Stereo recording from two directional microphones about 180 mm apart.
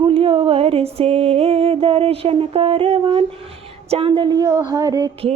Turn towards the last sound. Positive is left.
turn(degrees=-20)  # may be behind; listen again after turning